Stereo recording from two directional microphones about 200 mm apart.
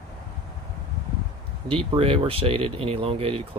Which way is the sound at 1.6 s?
25° right (ahead or behind).